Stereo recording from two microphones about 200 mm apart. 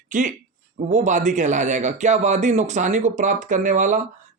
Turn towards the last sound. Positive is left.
turn(degrees=-40)  # may be behind; listen again after turning